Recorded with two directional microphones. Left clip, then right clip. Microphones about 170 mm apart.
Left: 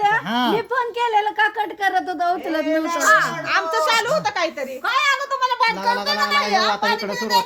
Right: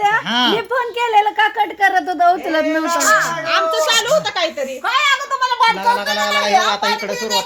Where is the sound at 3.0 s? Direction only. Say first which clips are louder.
Even; 45° left (ahead or behind).